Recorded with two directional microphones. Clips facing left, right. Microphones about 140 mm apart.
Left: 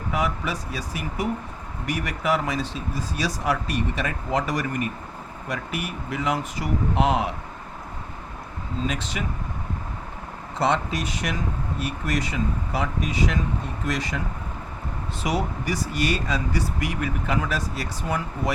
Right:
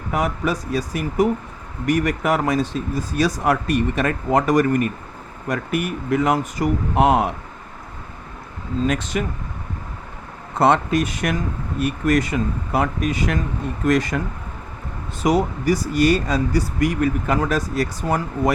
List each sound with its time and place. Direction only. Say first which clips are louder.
0.1 s speech: right 5 dB; 45° right (ahead or behind)
8.9 s speech: right 7 dB; 50° right (ahead or behind)
10.5 s speech: right 7 dB; 55° right (ahead or behind)
15.2 s speech: right 8 dB; 45° right (ahead or behind)